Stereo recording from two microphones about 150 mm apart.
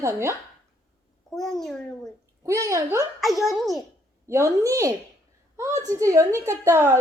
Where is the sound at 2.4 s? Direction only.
20° right (ahead or behind).